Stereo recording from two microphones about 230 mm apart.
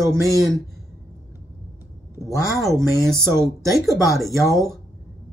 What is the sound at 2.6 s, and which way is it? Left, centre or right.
Speech, centre.